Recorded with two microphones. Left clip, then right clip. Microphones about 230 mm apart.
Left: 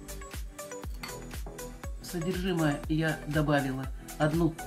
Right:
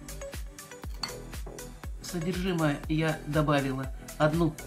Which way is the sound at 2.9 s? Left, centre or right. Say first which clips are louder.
Right 1 dB; centre.